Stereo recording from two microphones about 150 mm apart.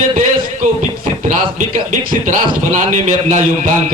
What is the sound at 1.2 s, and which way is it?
A man's voice, 60° right (ahead or behind).